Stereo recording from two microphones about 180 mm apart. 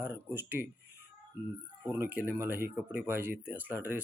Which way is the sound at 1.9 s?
10° right (ahead or behind).